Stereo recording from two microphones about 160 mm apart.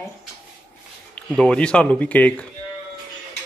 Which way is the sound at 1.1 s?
5° left (ahead or behind).